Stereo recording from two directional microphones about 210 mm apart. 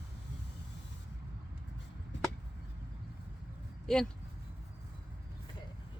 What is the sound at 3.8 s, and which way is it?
Speech, centre (ahead or behind).